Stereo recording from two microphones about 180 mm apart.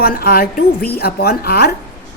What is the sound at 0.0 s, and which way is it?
A woman's voice, 55° left (ahead or behind).